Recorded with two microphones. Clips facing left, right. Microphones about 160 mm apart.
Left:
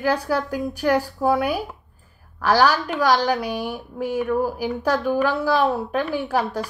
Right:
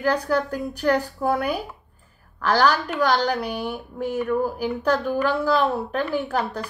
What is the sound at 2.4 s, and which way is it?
A woman's voice, 10° left (ahead or behind).